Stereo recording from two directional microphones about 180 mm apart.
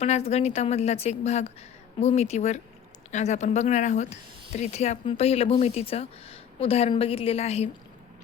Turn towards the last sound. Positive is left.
turn(degrees=35)  # may be behind; listen again after turning